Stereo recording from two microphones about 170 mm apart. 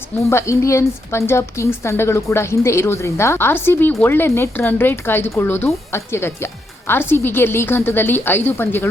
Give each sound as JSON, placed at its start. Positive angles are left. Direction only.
{"t": 0.3, "sound": "speech", "side_deg": 15}